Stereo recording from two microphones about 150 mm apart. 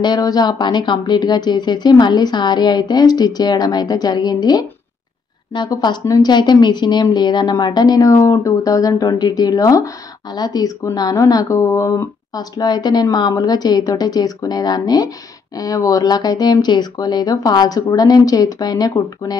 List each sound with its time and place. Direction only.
0.0 s speech: 25° left (ahead or behind)